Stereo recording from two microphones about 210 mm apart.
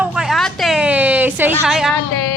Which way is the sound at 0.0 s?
Centre (ahead or behind).